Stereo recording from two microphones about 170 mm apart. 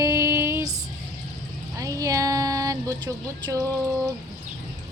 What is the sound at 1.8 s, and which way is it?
Speech, 20° right (ahead or behind).